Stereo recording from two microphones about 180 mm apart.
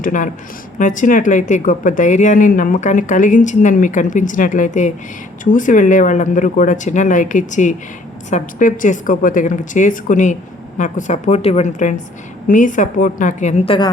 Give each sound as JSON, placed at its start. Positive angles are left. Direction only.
{"t": 0.0, "sound": "speech", "side_deg": 45}